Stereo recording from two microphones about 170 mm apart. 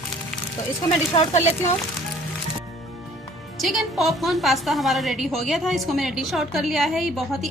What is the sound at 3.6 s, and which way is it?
A woman's voice, centre (ahead or behind).